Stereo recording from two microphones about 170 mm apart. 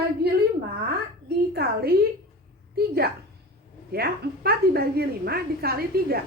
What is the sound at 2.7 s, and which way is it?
A woman's voice, 65° right (ahead or behind).